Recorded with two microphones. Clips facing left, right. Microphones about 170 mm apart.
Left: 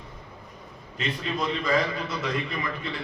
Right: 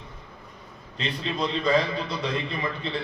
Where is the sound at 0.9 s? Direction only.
30° right (ahead or behind).